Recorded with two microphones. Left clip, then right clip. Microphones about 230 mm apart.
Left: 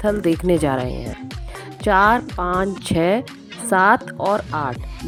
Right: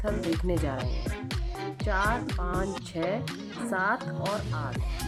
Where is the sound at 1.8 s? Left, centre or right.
Left.